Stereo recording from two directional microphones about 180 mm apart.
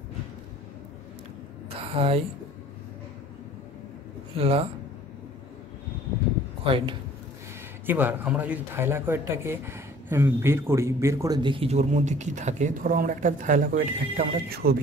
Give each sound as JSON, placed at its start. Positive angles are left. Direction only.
{"t": 1.7, "sound": "a sound", "side_deg": -30}
{"t": 4.4, "sound": "speech", "side_deg": -35}
{"t": 6.6, "sound": "speech", "side_deg": -30}
{"t": 7.8, "sound": "speech", "side_deg": -10}